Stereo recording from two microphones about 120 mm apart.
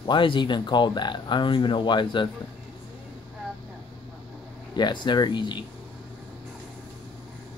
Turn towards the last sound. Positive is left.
turn(degrees=40)  # may be behind; listen again after turning